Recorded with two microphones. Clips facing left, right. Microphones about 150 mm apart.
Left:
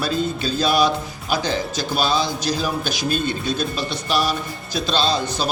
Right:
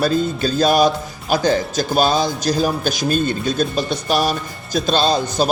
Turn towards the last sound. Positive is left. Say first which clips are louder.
# right 4 dB
turn(degrees=-45)  # may be behind; listen again after turning